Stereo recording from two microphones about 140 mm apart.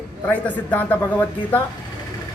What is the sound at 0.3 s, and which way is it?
A man's voice, 10° left (ahead or behind).